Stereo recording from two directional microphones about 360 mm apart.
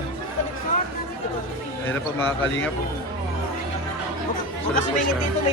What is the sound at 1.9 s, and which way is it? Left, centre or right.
Speech, centre.